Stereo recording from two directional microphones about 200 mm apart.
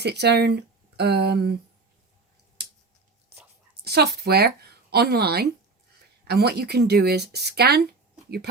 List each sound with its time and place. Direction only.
0.0 s speech: 55° right (ahead or behind)
3.8 s speech: 55° right (ahead or behind)